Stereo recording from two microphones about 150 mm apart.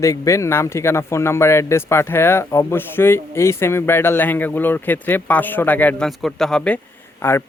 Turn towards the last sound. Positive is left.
turn(degrees=15)  # may be behind; listen again after turning